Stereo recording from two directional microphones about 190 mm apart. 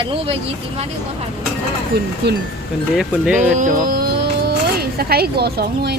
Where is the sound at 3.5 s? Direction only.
40° right (ahead or behind).